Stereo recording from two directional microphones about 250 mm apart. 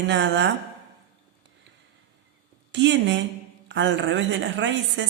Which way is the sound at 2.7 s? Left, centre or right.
Right.